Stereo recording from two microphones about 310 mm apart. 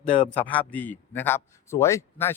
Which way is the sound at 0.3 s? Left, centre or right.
Centre.